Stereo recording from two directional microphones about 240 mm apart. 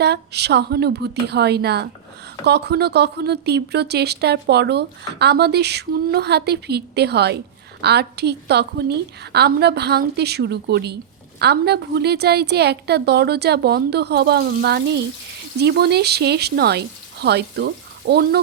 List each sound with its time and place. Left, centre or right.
0.0 s speech: right